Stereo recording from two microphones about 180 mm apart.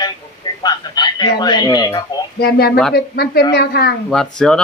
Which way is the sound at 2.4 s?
60° left (ahead or behind).